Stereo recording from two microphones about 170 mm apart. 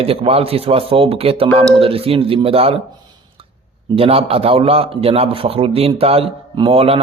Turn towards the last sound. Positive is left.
turn(degrees=-35)  # may be behind; listen again after turning